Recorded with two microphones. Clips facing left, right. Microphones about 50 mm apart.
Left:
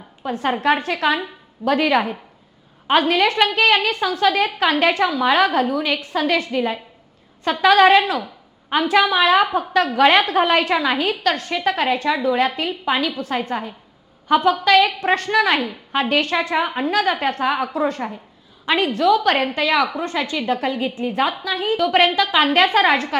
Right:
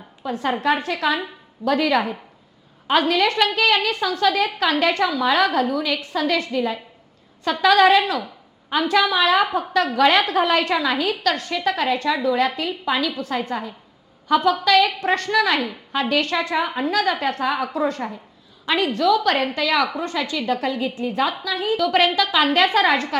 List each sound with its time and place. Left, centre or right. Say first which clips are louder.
0.3 s a woman's voice: left 2 dB; left